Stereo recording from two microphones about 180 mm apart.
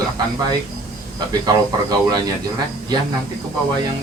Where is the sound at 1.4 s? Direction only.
20° right (ahead or behind).